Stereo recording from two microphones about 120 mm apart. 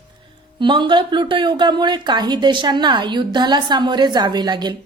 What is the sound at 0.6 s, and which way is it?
Speech, 40° right (ahead or behind).